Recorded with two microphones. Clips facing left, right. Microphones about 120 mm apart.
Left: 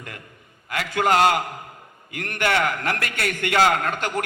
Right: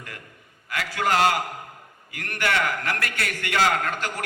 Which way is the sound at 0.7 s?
25° left (ahead or behind).